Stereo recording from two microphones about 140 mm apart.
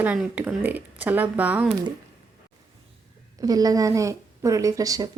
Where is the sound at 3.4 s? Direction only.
25° right (ahead or behind).